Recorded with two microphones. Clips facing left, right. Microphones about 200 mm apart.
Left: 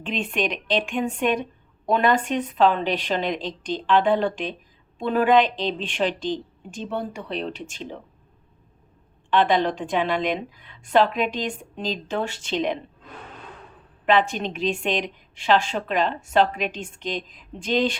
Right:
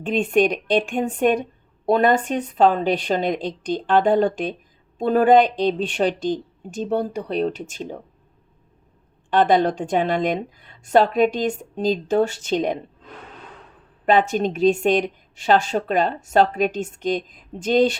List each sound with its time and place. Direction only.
0.0 s a woman's voice: 45° right (ahead or behind)
9.3 s a woman's voice: 45° right (ahead or behind)
14.0 s a woman's voice: 45° right (ahead or behind)